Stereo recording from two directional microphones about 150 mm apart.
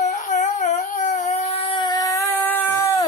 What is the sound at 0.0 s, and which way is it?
Crying, 55° left (ahead or behind).